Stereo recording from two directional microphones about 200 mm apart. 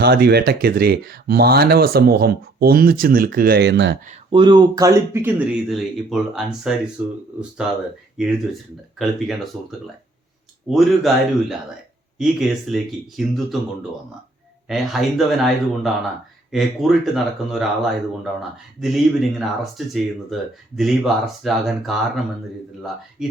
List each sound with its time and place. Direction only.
0.0 s speech: 55° right (ahead or behind)
4.3 s speech: 25° right (ahead or behind); by 7.1 s 10° right (ahead or behind)
8.2 s speech: 5° right (ahead or behind)
14.7 s speech: centre (ahead or behind)
23.2 s speech: 5° right (ahead or behind)